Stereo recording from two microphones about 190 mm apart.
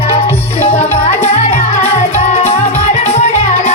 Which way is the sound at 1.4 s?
35° left (ahead or behind).